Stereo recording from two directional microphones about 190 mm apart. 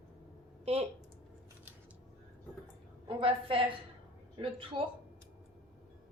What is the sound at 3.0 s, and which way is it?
A woman's voice, 25° right (ahead or behind).